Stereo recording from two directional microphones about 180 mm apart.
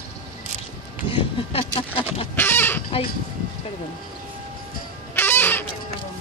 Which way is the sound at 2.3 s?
10° left (ahead or behind).